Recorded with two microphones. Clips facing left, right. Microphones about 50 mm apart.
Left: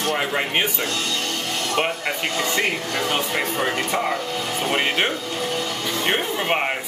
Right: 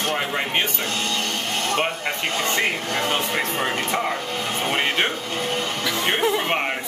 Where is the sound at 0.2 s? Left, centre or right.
Centre.